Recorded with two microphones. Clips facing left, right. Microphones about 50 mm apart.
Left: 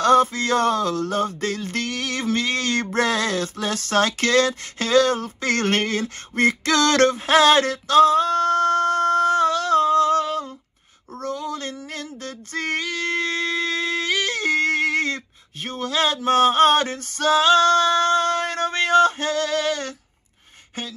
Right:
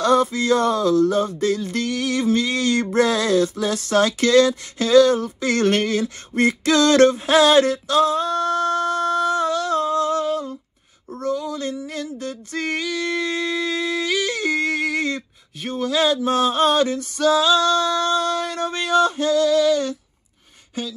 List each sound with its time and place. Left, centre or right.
0.0 s music: left
11.9 s a sound: left
20.8 s music: left